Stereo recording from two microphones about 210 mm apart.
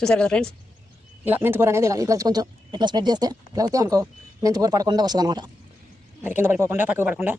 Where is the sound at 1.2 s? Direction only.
10° right (ahead or behind).